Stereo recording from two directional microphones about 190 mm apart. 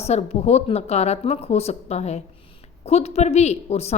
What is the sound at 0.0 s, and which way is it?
A woman's voice, 35° left (ahead or behind).